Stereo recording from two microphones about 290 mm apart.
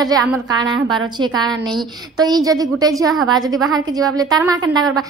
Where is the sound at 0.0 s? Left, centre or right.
Centre.